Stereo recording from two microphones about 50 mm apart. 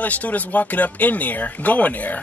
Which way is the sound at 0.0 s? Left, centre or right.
Left.